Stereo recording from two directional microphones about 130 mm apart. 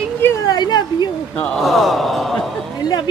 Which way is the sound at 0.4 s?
35° left (ahead or behind).